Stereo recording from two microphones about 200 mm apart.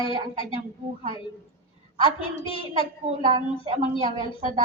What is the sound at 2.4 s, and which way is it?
Speech, 25° left (ahead or behind).